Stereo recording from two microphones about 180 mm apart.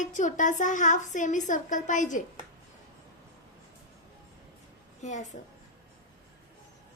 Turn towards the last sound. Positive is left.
turn(degrees=40)  # may be behind; listen again after turning